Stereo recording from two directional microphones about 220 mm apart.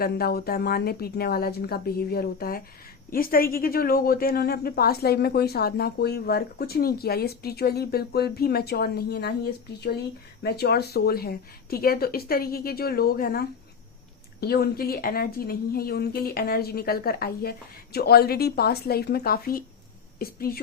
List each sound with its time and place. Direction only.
0.0 s a woman's voice: 45° left (ahead or behind)
10.4 s a woman's voice: 45° left (ahead or behind)